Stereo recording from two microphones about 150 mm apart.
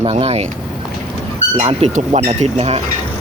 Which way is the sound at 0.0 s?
45° right (ahead or behind).